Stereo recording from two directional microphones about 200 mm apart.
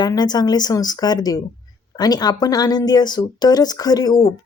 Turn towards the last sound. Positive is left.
turn(degrees=20)  # may be behind; listen again after turning